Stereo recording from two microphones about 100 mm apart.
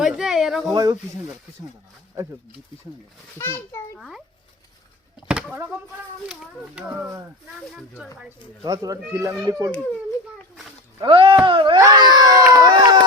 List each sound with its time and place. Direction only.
0.2 s a sound: 5° right (ahead or behind)
0.7 s speech: 40° right (ahead or behind)
3.3 s a child's voice: 25° left (ahead or behind)
3.9 s speech: 5° left (ahead or behind)
5.3 s a sound: 10° right (ahead or behind)
6.2 s a child's voice: 5° right (ahead or behind)
8.6 s speech: 40° right (ahead or behind)
11.0 s speech: 60° right (ahead or behind)
11.9 s speech: 45° right (ahead or behind)